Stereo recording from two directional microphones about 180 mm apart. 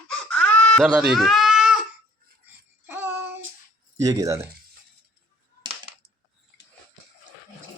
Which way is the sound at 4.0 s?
20° right (ahead or behind).